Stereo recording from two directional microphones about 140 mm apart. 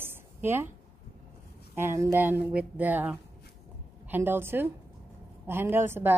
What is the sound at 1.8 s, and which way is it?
A woman's voice, 15° right (ahead or behind).